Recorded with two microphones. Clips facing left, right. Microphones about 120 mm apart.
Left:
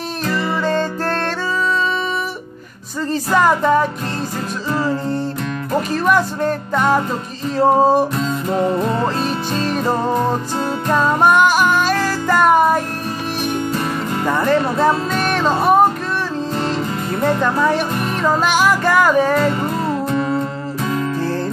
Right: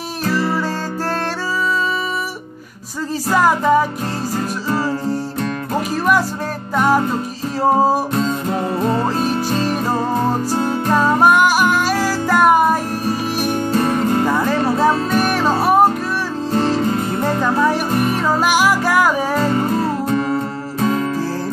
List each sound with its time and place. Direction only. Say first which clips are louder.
3.1 s music: left 1 dB; 5° right (ahead or behind)
6.0 s music: left 2 dB; 5° right (ahead or behind)
8.1 s music: right 2 dB; 45° right (ahead or behind)
11.0 s music: even; 5° right (ahead or behind)
13.7 s music: right 5 dB; 45° right (ahead or behind)
14.2 s music: even; 5° right (ahead or behind)
16.5 s music: right 7 dB; 40° right (ahead or behind)
17.4 s music: even; 10° right (ahead or behind)
19.4 s music: right 1 dB; 35° right (ahead or behind)